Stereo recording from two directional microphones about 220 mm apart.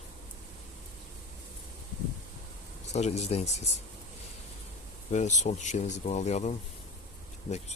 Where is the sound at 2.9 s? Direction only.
30° left (ahead or behind).